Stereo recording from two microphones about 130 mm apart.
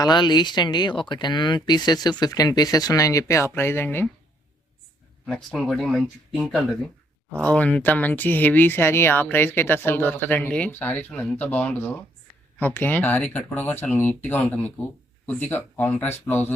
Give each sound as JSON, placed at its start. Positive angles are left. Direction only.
{"t": 0.0, "sound": "speech", "side_deg": 35}
{"t": 5.3, "sound": "speech", "side_deg": 5}
{"t": 7.5, "sound": "speech", "side_deg": 10}